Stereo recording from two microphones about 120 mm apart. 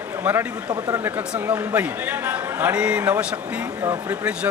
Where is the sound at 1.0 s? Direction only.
15° right (ahead or behind).